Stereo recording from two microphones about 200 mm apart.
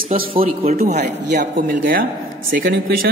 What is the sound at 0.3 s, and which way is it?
A woman's voice, 30° right (ahead or behind).